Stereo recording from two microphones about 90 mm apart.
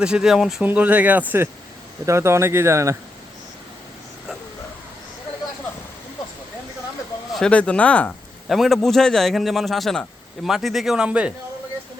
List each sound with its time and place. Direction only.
0.0 s a man's voice: 10° right (ahead or behind)
0.6 s speech: 20° right (ahead or behind)
2.0 s speech: 30° right (ahead or behind)
7.3 s speech: 10° left (ahead or behind)
8.4 s a man's voice: centre (ahead or behind)